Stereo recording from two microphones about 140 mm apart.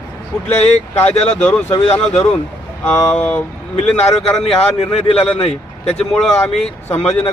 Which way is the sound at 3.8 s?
50° left (ahead or behind).